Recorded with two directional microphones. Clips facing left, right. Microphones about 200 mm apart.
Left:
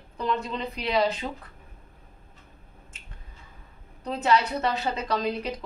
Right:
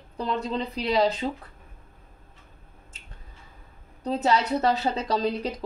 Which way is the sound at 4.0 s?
35° right (ahead or behind).